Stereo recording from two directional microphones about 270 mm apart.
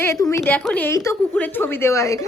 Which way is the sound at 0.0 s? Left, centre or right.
Centre.